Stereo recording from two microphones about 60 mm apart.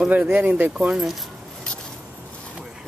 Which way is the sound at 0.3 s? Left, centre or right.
Right.